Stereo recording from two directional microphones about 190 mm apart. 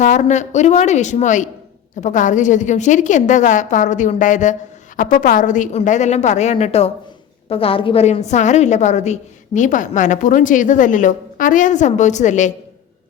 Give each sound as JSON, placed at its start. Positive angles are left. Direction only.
{"t": 0.0, "sound": "a woman's voice", "side_deg": 40}